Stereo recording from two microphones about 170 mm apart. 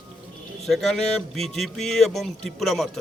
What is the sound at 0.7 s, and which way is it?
Speech, centre (ahead or behind).